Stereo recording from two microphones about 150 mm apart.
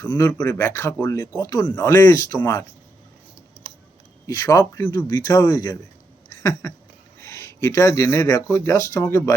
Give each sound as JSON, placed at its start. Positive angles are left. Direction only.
{"t": 0.0, "sound": "speech", "side_deg": 25}
{"t": 0.3, "sound": "speech", "side_deg": 15}
{"t": 4.3, "sound": "speech", "side_deg": 25}